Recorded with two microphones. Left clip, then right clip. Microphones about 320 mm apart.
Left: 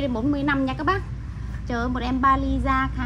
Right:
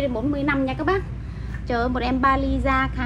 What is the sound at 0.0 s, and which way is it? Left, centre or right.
A woman's voice, left.